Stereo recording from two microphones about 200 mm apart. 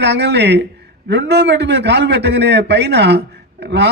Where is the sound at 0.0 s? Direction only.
60° right (ahead or behind).